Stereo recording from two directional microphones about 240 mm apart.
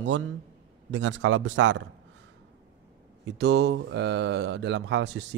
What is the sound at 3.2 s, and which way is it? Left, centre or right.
A man's voice, right.